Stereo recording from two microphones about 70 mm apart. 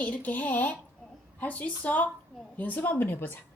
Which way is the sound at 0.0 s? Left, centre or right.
Left.